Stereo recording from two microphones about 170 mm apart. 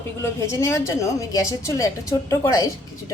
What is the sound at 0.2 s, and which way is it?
A woman's voice, 15° left (ahead or behind).